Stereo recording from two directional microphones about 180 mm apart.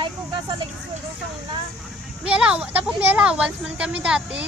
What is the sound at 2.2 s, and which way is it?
Speech, 5° right (ahead or behind).